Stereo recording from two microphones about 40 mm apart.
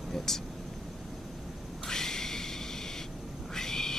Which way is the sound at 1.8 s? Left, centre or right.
Centre.